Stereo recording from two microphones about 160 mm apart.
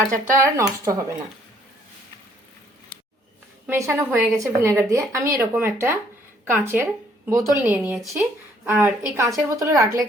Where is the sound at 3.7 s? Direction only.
15° right (ahead or behind).